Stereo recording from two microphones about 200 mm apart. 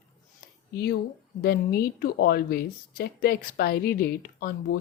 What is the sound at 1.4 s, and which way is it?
Speech, 50° left (ahead or behind).